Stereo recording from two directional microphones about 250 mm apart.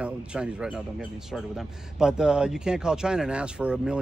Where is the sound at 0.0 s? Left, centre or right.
Centre.